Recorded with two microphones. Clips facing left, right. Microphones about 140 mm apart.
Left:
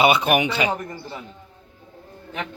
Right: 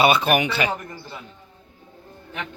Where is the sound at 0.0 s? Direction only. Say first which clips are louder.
Even; 20° left (ahead or behind).